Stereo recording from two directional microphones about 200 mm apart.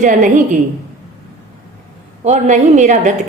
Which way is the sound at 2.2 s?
35° right (ahead or behind).